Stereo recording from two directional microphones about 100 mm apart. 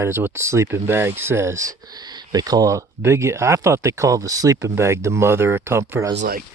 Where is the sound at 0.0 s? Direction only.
25° right (ahead or behind).